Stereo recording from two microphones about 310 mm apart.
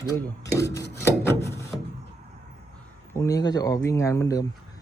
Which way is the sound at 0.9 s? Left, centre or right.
Centre.